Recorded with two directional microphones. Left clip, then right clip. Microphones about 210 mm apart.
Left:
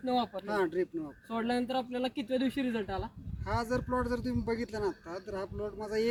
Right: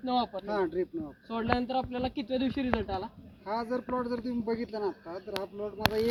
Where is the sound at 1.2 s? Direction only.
20° left (ahead or behind).